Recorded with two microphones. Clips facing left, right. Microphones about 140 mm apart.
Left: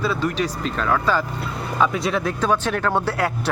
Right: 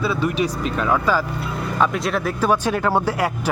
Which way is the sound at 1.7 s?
Centre (ahead or behind).